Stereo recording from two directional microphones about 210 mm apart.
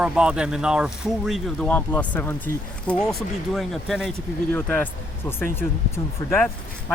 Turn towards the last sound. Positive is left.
turn(degrees=10)  # may be behind; listen again after turning